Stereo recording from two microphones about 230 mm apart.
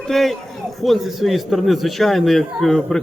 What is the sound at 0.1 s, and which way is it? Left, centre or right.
A man's voice, centre.